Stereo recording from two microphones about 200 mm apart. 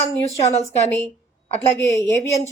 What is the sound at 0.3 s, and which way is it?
Speech, 35° left (ahead or behind).